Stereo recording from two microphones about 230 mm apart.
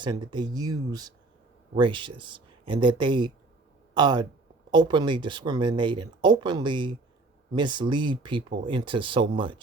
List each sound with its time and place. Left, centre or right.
0.0 s speech: centre